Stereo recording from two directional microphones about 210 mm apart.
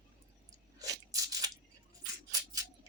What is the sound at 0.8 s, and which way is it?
Crunch, 15° right (ahead or behind).